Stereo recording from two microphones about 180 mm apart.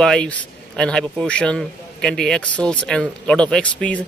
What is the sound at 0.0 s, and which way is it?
Speech, 5° left (ahead or behind).